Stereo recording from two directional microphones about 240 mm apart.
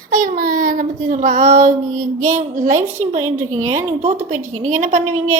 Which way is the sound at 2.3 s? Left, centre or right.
Right.